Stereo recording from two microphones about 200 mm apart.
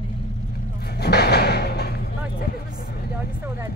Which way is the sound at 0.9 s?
55° left (ahead or behind).